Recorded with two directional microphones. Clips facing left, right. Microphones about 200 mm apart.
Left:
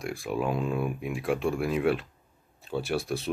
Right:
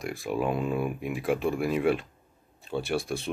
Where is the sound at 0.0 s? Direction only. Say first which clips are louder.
Right 1 dB; centre (ahead or behind).